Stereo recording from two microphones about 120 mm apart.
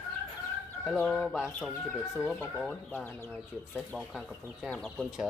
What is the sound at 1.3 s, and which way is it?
Speech, 5° right (ahead or behind).